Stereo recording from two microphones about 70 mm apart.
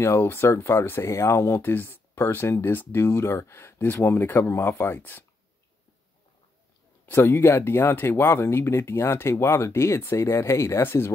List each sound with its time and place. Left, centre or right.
0.0 s speech: left
1.6 s speech: left
2.1 s speech: left
3.1 s speech: left
3.8 s speech: left
7.1 s speech: left